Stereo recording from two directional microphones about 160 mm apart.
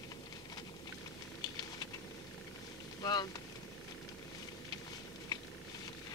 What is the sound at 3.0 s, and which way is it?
Speech, 25° left (ahead or behind).